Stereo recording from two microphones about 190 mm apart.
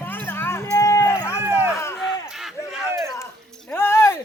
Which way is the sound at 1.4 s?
10° right (ahead or behind).